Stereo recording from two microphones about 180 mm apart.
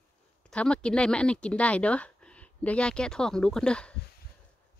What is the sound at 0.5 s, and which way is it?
Speech, 5° left (ahead or behind).